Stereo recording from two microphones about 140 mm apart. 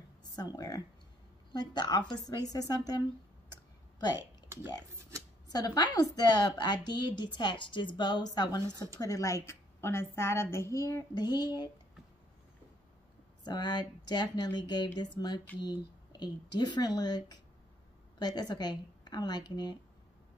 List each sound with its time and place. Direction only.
0.4 s a woman's voice: 30° left (ahead or behind)
5.5 s a woman's voice: 30° left (ahead or behind)
13.4 s a woman's voice: 30° left (ahead or behind)